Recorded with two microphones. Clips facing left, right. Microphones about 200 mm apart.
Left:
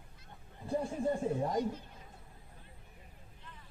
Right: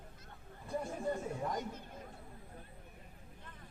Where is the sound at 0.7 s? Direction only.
30° left (ahead or behind).